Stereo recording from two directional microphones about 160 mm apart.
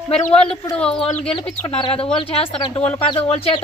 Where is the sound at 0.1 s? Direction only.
45° left (ahead or behind).